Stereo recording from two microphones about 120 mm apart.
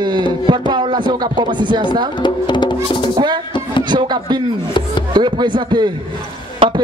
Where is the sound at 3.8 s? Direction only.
40° right (ahead or behind).